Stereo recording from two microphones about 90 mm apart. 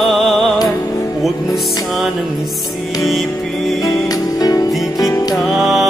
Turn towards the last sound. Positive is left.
turn(degrees=0)  # may be behind; listen again after turning